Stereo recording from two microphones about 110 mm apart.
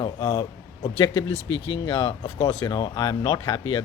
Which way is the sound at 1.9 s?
45° left (ahead or behind).